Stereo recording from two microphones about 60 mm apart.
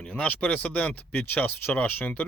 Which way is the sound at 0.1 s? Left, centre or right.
Left.